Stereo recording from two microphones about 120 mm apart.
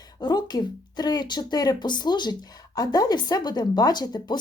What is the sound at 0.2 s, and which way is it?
Speech, 35° left (ahead or behind).